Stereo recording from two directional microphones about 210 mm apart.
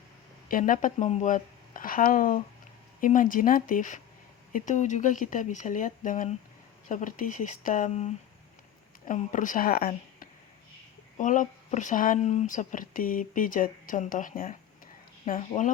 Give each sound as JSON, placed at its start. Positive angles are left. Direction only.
{"t": 0.5, "sound": "speech", "side_deg": 40}